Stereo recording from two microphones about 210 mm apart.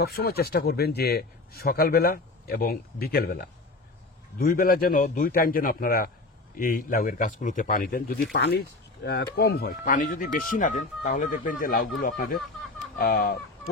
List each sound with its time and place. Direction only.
0.0 s a man's voice: 45° left (ahead or behind)